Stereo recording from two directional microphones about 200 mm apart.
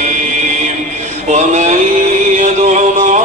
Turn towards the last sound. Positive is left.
turn(degrees=-35)  # may be behind; listen again after turning